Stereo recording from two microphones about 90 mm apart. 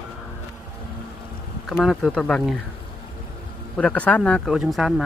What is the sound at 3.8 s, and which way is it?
Speech, 15° left (ahead or behind).